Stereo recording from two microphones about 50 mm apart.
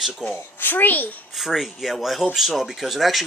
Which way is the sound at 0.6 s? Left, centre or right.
Left.